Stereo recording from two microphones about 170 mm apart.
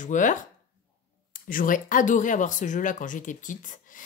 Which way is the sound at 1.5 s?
55° left (ahead or behind).